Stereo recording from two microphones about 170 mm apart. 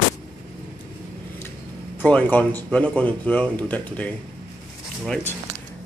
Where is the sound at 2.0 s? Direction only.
10° left (ahead or behind).